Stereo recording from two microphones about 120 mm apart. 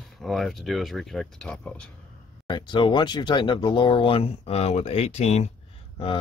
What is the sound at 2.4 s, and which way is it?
Speech, 40° left (ahead or behind).